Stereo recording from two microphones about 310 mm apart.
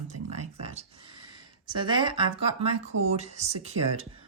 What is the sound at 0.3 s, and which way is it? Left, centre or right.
Speech, right.